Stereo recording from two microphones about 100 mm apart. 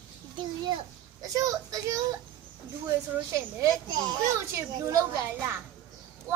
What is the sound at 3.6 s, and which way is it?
Children playing, 40° right (ahead or behind).